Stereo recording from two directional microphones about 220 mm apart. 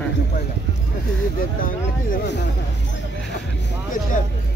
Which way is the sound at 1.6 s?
45° left (ahead or behind).